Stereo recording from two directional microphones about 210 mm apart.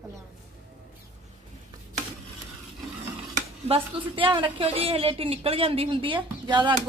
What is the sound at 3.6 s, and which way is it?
A woman's voice, 25° right (ahead or behind).